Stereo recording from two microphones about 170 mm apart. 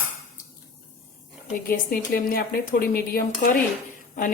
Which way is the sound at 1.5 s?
55° left (ahead or behind).